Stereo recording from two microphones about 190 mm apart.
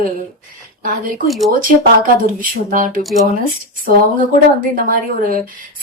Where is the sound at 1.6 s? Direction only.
45° right (ahead or behind).